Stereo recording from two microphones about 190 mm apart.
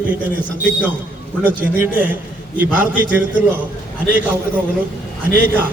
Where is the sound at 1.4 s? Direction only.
10° right (ahead or behind).